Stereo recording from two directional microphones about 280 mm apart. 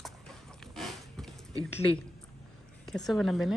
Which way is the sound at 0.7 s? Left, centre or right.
Centre.